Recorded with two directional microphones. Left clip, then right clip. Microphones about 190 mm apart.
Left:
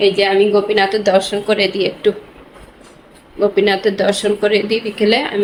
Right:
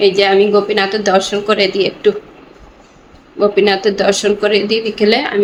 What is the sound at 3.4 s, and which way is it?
Speech, 5° right (ahead or behind).